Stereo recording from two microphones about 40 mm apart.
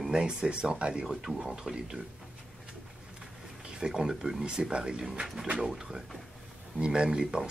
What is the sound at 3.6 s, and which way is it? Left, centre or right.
Speech, centre.